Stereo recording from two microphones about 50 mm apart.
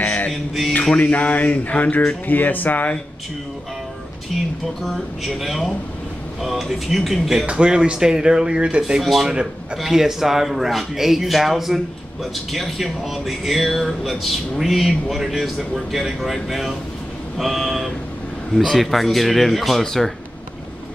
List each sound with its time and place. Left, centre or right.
0.0 s mantra: left
0.3 s mantra: centre
0.9 s speech: left
4.8 s speech: centre
7.4 s speech: centre
9.0 s speech: centre